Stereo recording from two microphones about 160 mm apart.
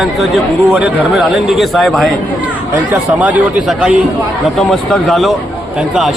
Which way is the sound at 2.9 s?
10° right (ahead or behind).